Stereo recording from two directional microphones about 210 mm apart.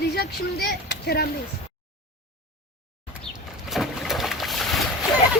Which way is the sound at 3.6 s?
Centre (ahead or behind).